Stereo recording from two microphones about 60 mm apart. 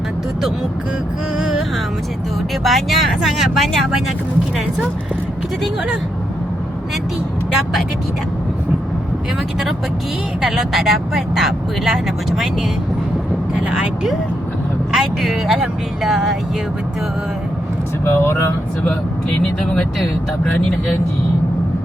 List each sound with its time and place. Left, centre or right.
2.6 s speech: centre
10.4 s speech: centre
13.7 s speech: centre
18.0 s speech: left